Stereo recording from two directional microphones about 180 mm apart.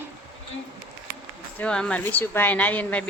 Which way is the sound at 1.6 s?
5° left (ahead or behind).